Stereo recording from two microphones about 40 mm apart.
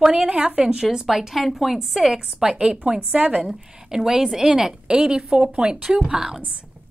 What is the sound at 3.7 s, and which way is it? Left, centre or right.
A woman's voice, centre.